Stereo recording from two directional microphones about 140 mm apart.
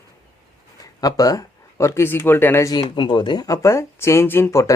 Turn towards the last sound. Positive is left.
turn(degrees=20)  # may be behind; listen again after turning